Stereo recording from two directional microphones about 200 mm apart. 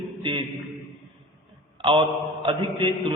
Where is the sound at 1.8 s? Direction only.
25° right (ahead or behind).